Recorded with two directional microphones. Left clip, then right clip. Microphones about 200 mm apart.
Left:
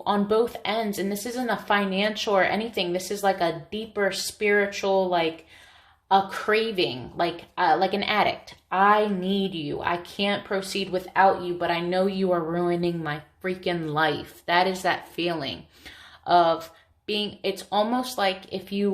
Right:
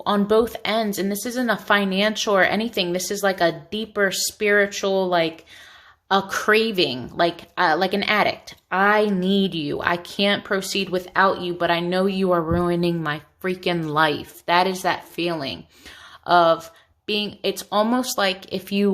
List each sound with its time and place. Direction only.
0.0 s a woman's voice: 35° right (ahead or behind)